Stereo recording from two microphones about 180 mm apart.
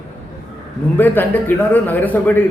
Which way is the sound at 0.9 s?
10° left (ahead or behind).